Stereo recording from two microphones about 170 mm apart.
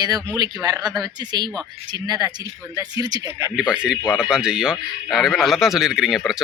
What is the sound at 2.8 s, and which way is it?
Speech, 20° right (ahead or behind).